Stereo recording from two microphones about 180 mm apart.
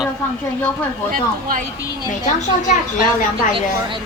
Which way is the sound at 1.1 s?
50° right (ahead or behind).